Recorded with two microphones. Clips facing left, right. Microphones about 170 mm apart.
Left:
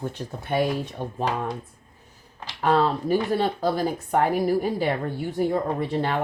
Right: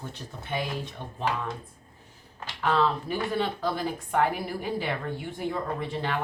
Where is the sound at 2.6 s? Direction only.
40° left (ahead or behind).